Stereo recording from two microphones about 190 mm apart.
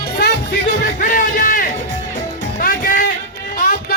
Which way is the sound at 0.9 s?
45° left (ahead or behind).